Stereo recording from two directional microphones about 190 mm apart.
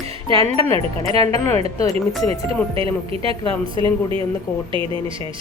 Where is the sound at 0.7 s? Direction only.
30° right (ahead or behind).